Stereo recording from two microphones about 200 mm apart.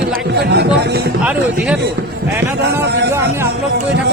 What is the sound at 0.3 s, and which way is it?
Speech, 55° right (ahead or behind).